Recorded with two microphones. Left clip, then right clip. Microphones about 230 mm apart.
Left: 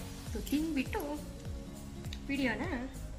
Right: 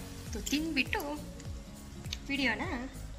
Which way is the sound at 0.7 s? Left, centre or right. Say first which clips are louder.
Right 4 dB; centre.